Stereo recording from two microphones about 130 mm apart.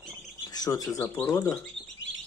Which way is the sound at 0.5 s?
30° left (ahead or behind).